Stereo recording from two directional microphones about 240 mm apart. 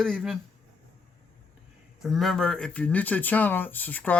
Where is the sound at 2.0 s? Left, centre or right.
Centre.